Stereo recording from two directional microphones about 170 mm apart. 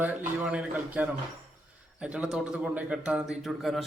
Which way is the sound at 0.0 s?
10° right (ahead or behind).